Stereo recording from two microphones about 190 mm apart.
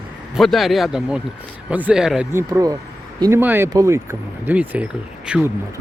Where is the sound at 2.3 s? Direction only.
15° right (ahead or behind).